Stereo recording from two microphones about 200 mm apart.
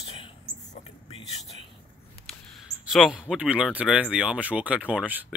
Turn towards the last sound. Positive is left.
turn(degrees=-5)  # may be behind; listen again after turning